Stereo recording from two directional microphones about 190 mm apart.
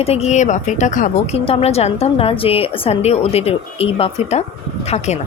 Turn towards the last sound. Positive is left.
turn(degrees=35)  # may be behind; listen again after turning